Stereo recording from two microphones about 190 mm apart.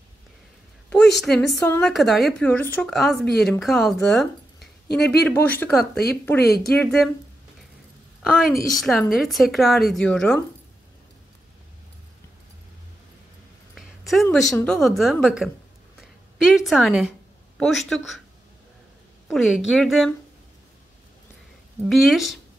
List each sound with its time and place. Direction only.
1.2 s speech: 5° left (ahead or behind)
4.8 s speech: 60° left (ahead or behind)
5.2 s speech: 10° left (ahead or behind)
6.4 s speech: 55° left (ahead or behind)
6.7 s speech: 5° left (ahead or behind)
8.6 s speech: centre (ahead or behind)
13.7 s a sound: centre (ahead or behind)
14.3 s a woman's voice: centre (ahead or behind)
19.2 s speech: centre (ahead or behind)
21.8 s speech: centre (ahead or behind)